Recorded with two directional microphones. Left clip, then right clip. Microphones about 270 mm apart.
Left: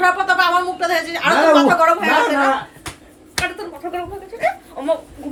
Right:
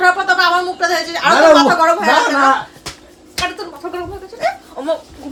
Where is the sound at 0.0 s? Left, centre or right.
Right.